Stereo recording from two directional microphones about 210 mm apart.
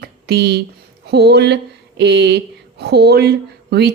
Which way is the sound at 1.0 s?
50° right (ahead or behind).